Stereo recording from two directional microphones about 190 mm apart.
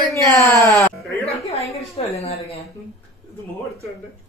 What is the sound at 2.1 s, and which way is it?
Speech, 30° left (ahead or behind).